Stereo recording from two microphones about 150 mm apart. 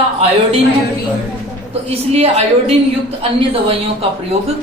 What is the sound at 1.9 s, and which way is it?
Speech, 40° right (ahead or behind).